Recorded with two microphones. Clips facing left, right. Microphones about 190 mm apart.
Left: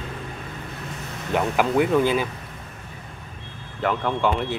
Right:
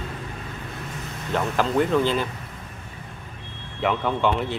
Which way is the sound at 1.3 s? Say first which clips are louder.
Left 2 dB; 10° left (ahead or behind).